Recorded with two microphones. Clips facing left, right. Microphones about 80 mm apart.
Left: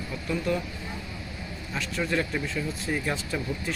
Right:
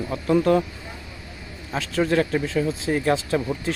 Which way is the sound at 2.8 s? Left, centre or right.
Right.